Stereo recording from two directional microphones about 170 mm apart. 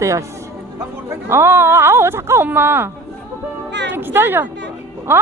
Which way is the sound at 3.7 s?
90° right.